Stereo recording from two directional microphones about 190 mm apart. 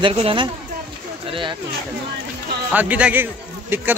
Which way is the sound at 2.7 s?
10° right (ahead or behind).